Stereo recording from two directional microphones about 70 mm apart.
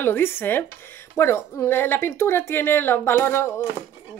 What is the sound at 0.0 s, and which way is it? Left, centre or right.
Speech, left.